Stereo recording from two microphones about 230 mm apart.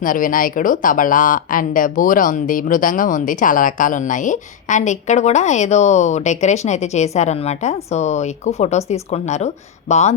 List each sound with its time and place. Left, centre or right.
0.0 s speech: left